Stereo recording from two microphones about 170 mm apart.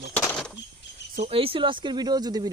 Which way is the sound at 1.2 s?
35° right (ahead or behind).